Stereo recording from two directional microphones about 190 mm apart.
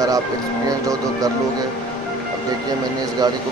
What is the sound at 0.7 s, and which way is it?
Speech, 20° right (ahead or behind).